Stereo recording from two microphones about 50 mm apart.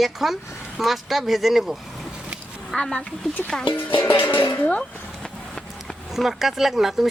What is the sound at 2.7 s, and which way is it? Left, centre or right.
Speech, centre.